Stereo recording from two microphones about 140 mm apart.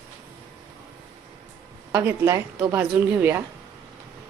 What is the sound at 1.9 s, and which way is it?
A woman's voice, 15° right (ahead or behind).